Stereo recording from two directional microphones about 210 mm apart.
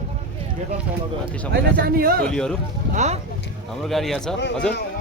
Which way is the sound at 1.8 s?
45° right (ahead or behind).